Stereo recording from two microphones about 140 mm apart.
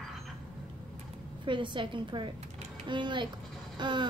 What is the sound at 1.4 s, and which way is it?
Speech, 35° right (ahead or behind).